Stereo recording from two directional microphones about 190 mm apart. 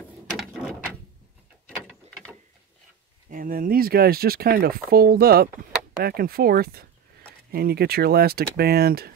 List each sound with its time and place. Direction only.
0.3 s gears: centre (ahead or behind)
3.3 s speech: 45° right (ahead or behind)